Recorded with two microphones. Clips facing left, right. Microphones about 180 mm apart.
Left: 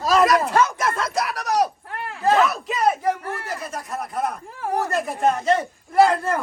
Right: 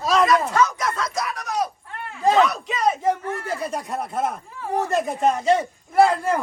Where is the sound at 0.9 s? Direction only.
60° left (ahead or behind).